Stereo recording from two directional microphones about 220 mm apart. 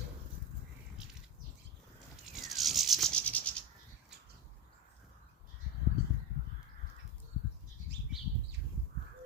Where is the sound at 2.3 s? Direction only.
Centre (ahead or behind).